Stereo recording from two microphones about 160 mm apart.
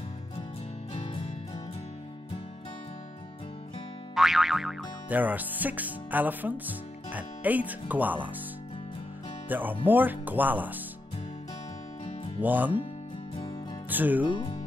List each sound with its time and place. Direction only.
0.9 s music: 35° left (ahead or behind)
4.1 s speech: centre (ahead or behind)
9.5 s speech: 10° right (ahead or behind)
12.4 s speech: 10° right (ahead or behind)
13.8 s speech: 10° right (ahead or behind)
14.2 s speech: 30° left (ahead or behind)